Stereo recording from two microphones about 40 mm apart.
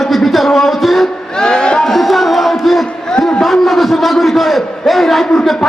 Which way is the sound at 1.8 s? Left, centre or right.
Centre.